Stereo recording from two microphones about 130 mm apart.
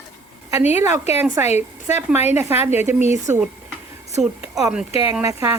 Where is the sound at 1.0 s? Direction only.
55° left (ahead or behind).